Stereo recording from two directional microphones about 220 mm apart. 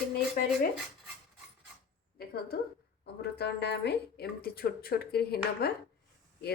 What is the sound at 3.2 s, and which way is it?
A woman's voice, 50° left (ahead or behind).